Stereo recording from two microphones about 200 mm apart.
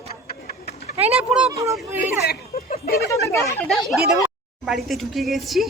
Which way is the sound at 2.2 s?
45° left (ahead or behind).